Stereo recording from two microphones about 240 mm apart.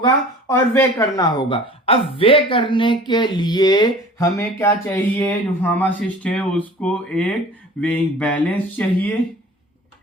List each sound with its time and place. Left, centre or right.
0.0 s speech: centre